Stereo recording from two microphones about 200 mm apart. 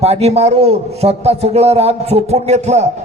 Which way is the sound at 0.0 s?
30° right (ahead or behind).